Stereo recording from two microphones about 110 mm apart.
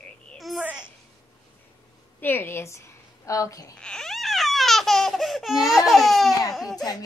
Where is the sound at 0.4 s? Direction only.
Centre (ahead or behind).